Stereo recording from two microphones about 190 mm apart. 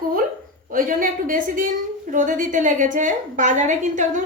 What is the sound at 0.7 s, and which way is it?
A woman's voice, 45° right (ahead or behind).